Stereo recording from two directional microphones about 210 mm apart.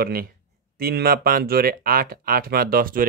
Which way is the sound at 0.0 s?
45° right (ahead or behind).